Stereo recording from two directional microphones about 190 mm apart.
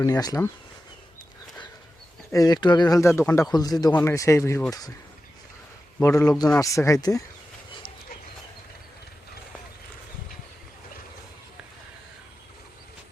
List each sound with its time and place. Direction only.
0.0 s speech: 20° left (ahead or behind)
2.3 s speech: 20° left (ahead or behind)
6.0 s speech: 15° left (ahead or behind)